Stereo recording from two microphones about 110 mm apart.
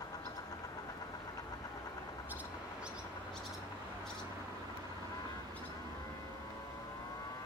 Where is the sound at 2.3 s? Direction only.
15° right (ahead or behind).